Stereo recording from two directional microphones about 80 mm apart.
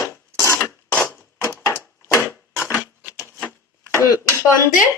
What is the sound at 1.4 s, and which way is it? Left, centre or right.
Wood, left.